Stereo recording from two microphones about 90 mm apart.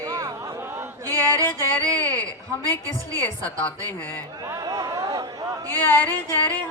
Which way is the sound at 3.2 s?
15° left (ahead or behind).